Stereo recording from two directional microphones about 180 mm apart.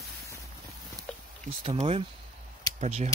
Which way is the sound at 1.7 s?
30° right (ahead or behind).